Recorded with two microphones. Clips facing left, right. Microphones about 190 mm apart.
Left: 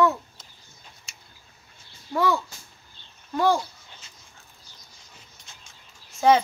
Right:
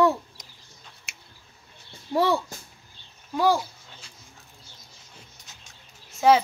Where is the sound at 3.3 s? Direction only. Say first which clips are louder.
Even; 5° right (ahead or behind).